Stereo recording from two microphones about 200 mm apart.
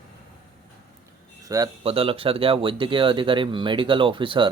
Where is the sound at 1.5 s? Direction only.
20° right (ahead or behind).